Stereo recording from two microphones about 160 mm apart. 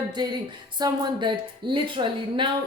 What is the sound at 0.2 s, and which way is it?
A woman's voice, 25° right (ahead or behind).